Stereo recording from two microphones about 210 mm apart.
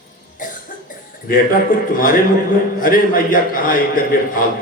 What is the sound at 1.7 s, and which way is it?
A man's voice, 40° left (ahead or behind).